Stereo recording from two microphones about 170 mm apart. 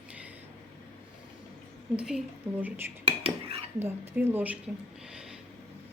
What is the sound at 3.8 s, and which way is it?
Speech, 15° right (ahead or behind).